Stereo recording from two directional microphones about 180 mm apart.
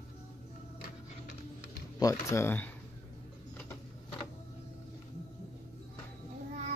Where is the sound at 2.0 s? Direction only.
15° left (ahead or behind).